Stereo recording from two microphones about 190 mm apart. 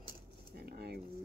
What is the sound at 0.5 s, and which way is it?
Speech, 55° right (ahead or behind).